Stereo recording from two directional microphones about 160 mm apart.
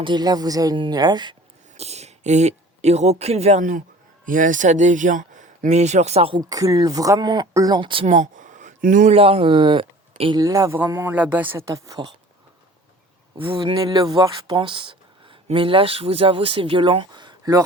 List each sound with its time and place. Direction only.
0.0 s a man's voice: 25° right (ahead or behind)
1.7 s speech: 40° right (ahead or behind)
6.4 s a man's voice: 20° right (ahead or behind)
8.0 s speech: 50° right (ahead or behind)
9.1 s speech: 35° right (ahead or behind)
10.4 s a man's voice: 20° right (ahead or behind)
13.3 s speech: 35° right (ahead or behind)